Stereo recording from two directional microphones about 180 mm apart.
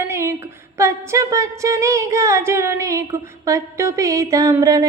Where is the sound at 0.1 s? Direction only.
15° right (ahead or behind).